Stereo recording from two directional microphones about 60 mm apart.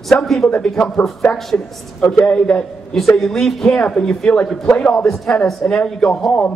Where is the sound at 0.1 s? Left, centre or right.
Centre.